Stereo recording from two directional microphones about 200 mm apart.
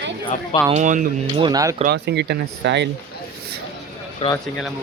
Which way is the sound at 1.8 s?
55° right (ahead or behind).